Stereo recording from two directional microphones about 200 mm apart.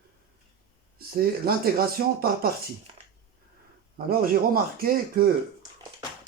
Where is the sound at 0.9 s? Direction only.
50° right (ahead or behind).